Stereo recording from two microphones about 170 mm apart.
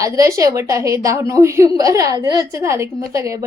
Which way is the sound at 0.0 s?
15° right (ahead or behind).